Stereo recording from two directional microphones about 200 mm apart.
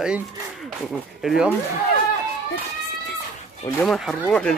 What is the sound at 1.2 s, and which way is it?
Speech, 5° right (ahead or behind).